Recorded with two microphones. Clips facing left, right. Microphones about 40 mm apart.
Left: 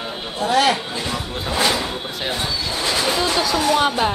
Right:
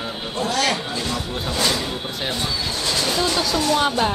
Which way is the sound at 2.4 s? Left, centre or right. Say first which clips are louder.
Left 1 dB; centre.